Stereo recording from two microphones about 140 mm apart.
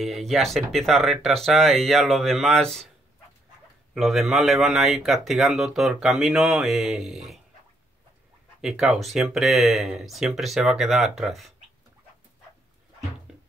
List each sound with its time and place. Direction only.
0.0 s speech: centre (ahead or behind)
3.9 s speech: centre (ahead or behind)
8.5 s speech: 5° right (ahead or behind)